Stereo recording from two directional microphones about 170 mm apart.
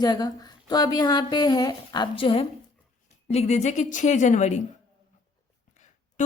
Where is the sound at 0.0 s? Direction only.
25° left (ahead or behind); by 4.5 s 45° left (ahead or behind).